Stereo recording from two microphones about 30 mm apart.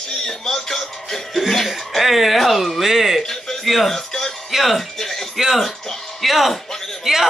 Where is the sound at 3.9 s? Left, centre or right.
Centre.